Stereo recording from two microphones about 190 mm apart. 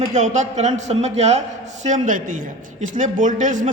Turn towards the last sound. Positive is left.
turn(degrees=-40)  # may be behind; listen again after turning